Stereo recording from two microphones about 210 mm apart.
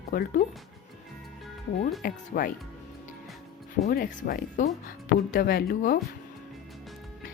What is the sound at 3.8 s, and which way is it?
Speech, 45° left (ahead or behind).